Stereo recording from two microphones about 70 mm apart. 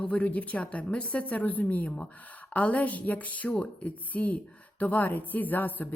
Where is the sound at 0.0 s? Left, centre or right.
Centre.